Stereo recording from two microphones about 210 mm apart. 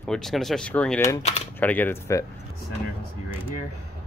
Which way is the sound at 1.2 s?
30° left (ahead or behind).